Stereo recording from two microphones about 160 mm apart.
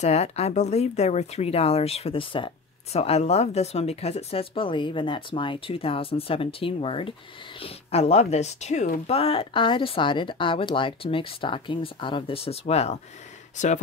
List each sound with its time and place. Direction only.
0.0 s speech: 45° left (ahead or behind)
9.1 s speech: 35° left (ahead or behind)